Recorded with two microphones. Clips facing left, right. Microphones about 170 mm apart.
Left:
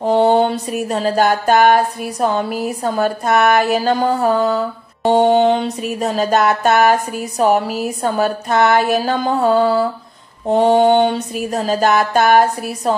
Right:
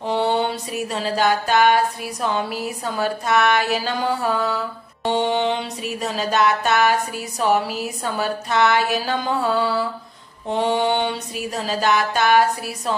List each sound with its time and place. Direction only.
0.0 s music: 45° left (ahead or behind)